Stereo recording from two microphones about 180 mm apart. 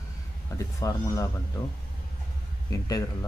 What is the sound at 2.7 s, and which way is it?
Speech, 20° left (ahead or behind).